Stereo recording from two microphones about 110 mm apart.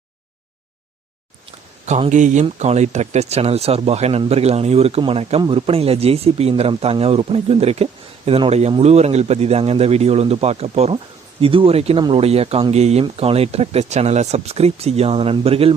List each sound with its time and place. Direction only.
1.5 s speech: 75° right (ahead or behind)
12.7 s speech: 80° right; by 15.7 s 60° right (ahead or behind)